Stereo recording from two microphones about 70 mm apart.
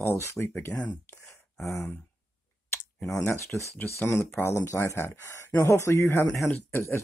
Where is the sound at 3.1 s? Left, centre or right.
Left.